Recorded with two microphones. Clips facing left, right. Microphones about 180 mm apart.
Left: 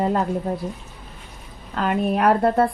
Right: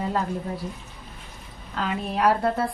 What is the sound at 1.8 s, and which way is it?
Speech, 60° left (ahead or behind).